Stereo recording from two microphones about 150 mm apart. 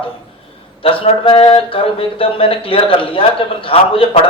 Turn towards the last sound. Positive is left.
turn(degrees=40)  # may be behind; listen again after turning